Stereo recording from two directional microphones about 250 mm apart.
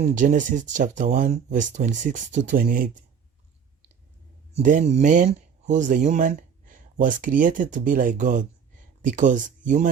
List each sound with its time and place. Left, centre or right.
0.0 s speech: right
4.5 s speech: right